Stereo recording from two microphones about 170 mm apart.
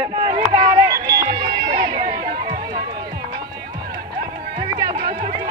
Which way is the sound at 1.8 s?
25° right (ahead or behind).